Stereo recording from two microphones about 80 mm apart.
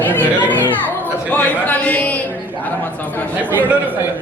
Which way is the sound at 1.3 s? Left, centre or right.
Left.